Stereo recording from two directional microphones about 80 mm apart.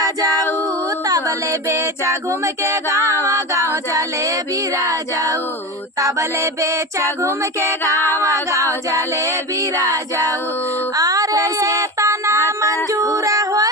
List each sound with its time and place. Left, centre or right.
0.0 s a capella: right
1.6 s music: right
4.8 s a sound: right
6.0 s music: right
9.8 s a sound: right
11.8 s music: right